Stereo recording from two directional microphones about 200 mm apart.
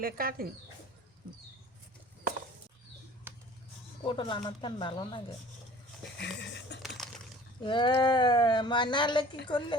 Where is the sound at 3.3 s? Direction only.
10° right (ahead or behind).